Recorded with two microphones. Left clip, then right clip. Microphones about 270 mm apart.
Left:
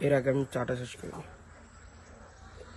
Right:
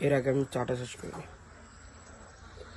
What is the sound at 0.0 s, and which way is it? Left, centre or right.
Speech, centre.